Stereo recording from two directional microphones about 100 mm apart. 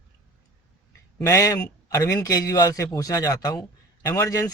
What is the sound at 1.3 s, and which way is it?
Speech, 35° left (ahead or behind).